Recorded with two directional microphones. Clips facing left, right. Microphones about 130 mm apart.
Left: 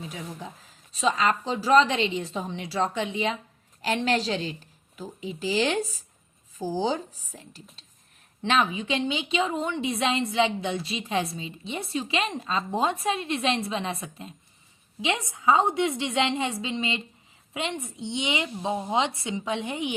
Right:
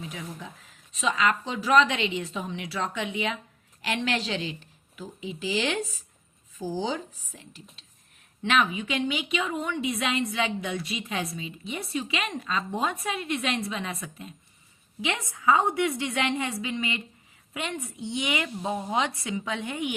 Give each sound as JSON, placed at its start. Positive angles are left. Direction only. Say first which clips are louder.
{"t": 0.1, "sound": "a woman's voice", "louder": "left 1 dB", "side_deg": 30}